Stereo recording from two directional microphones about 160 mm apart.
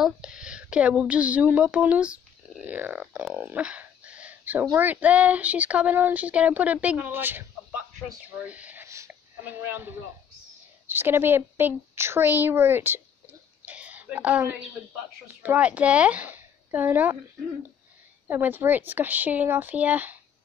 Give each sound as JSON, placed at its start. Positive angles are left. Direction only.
{"t": 0.0, "sound": "speech", "side_deg": -5}
{"t": 8.5, "sound": "a sound", "side_deg": -10}
{"t": 10.9, "sound": "speech", "side_deg": -15}
{"t": 13.7, "sound": "a sound", "side_deg": -10}
{"t": 15.4, "sound": "speech", "side_deg": -10}
{"t": 18.3, "sound": "speech", "side_deg": -10}